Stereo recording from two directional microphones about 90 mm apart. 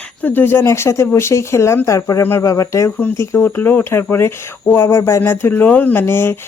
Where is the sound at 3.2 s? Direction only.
25° left (ahead or behind).